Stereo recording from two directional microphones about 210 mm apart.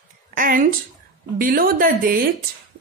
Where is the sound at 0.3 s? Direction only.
40° right (ahead or behind).